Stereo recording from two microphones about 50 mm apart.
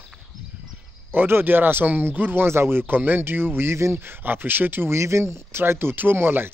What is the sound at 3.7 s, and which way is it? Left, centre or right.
Speech, right.